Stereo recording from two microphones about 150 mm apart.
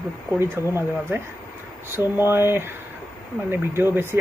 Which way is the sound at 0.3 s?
15° right (ahead or behind).